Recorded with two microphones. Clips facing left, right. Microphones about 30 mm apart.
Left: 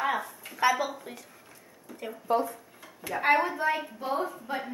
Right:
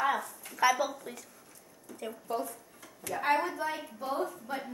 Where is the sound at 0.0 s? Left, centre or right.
Centre.